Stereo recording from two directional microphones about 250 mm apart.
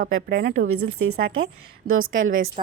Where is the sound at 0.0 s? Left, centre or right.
Right.